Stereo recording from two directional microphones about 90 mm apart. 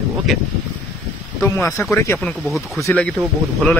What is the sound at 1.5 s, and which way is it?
Speech, 30° left (ahead or behind).